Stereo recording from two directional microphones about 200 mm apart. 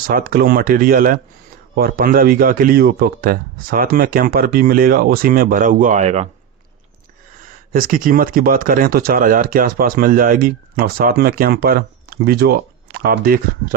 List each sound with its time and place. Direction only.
0.1 s speech: 45° right (ahead or behind)
7.7 s speech: 45° right (ahead or behind)